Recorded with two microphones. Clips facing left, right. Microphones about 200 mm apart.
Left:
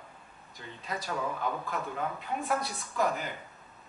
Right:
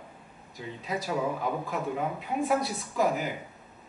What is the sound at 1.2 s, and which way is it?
A woman's voice, 15° right (ahead or behind).